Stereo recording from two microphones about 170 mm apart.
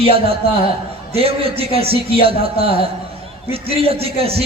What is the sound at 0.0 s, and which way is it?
A man's voice, 35° right (ahead or behind).